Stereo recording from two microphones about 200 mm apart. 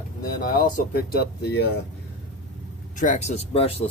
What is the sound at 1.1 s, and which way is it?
Speech, 55° left (ahead or behind).